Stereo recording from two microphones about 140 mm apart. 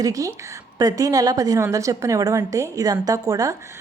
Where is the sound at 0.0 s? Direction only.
25° right (ahead or behind).